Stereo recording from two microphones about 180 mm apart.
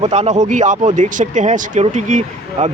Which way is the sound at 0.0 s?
35° right (ahead or behind).